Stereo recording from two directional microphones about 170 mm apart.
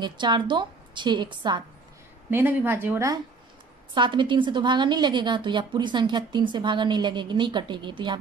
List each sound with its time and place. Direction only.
0.0 s a woman's voice: 25° right (ahead or behind)
2.3 s speech: 10° right (ahead or behind)
3.9 s a woman's voice: 30° right (ahead or behind)